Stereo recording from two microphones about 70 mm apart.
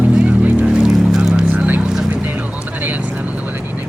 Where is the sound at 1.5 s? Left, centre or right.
Right.